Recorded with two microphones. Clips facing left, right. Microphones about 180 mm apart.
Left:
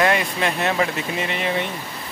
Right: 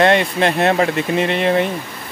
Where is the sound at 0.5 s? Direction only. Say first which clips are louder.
Right 6 dB; 55° right (ahead or behind).